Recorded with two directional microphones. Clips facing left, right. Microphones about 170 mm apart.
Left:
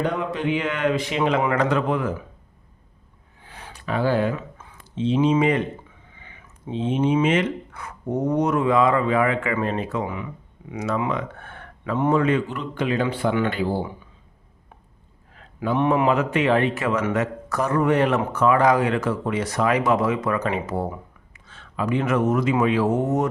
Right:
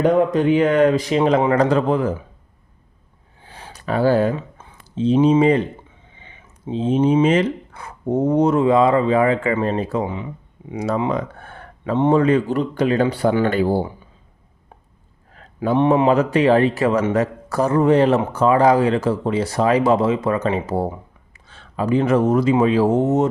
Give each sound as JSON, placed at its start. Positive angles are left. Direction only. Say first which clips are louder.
{"t": 0.0, "sound": "speech", "louder": "right 9 dB", "side_deg": -45}
{"t": 3.4, "sound": "a sound", "louder": "right 4 dB", "side_deg": -30}
{"t": 6.1, "sound": "speech", "louder": "right 1 dB", "side_deg": -25}
{"t": 15.3, "sound": "speech", "louder": "right 5 dB", "side_deg": -40}